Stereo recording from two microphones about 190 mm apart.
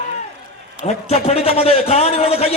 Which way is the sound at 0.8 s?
35° left (ahead or behind).